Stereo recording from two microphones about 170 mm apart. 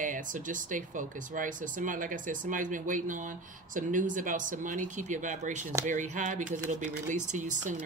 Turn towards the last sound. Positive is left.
turn(degrees=-45)  # may be behind; listen again after turning